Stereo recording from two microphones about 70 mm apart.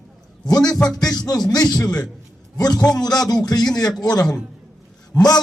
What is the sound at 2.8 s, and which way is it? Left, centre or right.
Speech, centre.